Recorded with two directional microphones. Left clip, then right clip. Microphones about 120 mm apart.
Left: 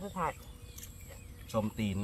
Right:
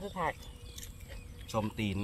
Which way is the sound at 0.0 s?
20° right (ahead or behind).